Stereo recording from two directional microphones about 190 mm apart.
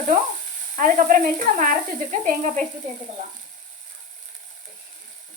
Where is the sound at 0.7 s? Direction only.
45° right (ahead or behind).